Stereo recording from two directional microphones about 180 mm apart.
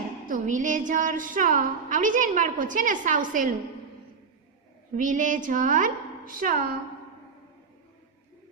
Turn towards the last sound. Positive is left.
turn(degrees=-50)  # may be behind; listen again after turning